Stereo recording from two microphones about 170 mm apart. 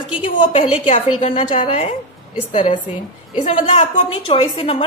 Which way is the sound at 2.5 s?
50° left (ahead or behind).